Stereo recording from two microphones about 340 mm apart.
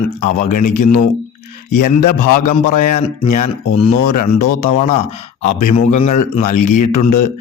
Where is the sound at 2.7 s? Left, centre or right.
Left.